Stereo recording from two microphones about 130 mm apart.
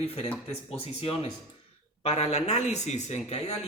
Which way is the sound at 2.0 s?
55° left (ahead or behind).